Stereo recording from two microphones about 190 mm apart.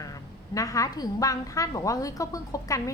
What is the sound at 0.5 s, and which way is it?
A woman's voice, 15° left (ahead or behind).